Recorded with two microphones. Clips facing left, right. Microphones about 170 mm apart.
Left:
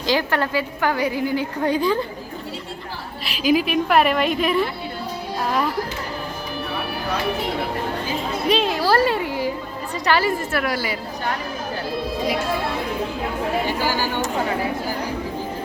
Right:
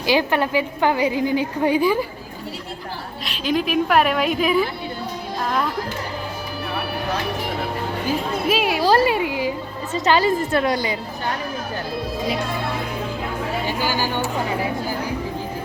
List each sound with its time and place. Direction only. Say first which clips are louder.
0.0 s a woman's voice: right 2 dB; 15° right (ahead or behind)
3.2 s a woman's voice: left 3 dB; 5° left (ahead or behind)
8.4 s a woman's voice: right 1 dB; 10° right (ahead or behind)